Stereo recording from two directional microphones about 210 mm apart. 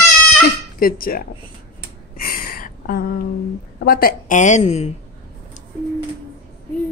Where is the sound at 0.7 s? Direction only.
45° left (ahead or behind).